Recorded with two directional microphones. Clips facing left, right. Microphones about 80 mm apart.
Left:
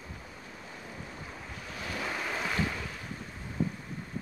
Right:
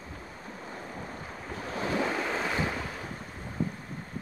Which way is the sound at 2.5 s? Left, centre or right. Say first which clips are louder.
Right 2 dB; right.